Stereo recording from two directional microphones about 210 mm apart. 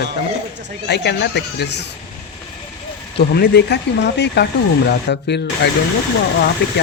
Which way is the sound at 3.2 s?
50° left (ahead or behind).